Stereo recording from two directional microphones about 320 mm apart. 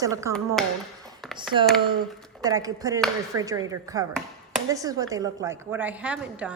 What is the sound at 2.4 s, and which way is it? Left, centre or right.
A woman's voice, centre.